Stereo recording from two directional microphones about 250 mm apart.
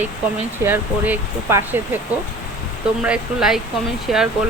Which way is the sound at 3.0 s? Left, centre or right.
Centre.